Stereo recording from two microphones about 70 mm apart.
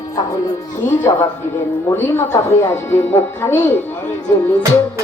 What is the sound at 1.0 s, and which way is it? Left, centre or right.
Speech, left.